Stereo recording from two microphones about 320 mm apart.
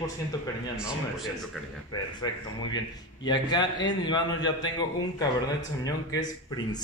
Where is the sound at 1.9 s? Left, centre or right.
Centre.